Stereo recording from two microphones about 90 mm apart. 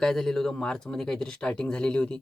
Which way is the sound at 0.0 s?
5° left (ahead or behind).